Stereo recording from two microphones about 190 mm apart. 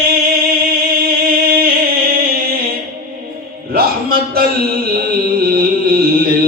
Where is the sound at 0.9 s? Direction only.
50° right (ahead or behind).